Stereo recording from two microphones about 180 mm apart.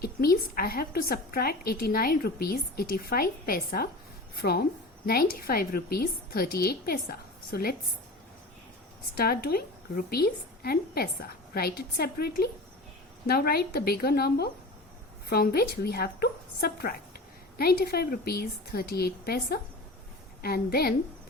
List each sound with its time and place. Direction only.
0.0 s a woman's voice: 55° left (ahead or behind)
9.1 s a woman's voice: 60° left (ahead or behind)